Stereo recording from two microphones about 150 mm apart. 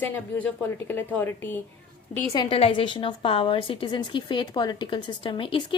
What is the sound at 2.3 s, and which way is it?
A woman's voice, 30° left (ahead or behind).